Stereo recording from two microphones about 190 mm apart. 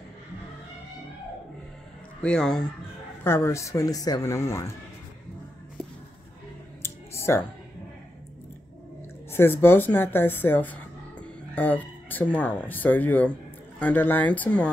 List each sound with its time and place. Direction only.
2.2 s speech: 5° left (ahead or behind)
6.8 s a sound: 15° left (ahead or behind)
9.3 s speech: 10° left (ahead or behind)